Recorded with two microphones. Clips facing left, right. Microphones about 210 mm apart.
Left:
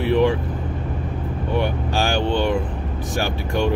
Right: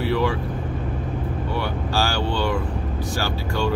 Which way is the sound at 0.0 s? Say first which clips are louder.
Left 4 dB; 20° left (ahead or behind).